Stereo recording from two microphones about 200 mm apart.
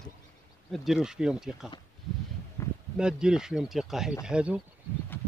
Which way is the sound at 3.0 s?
5° right (ahead or behind).